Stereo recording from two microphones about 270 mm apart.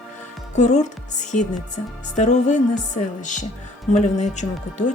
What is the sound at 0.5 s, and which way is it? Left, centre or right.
Speech, left.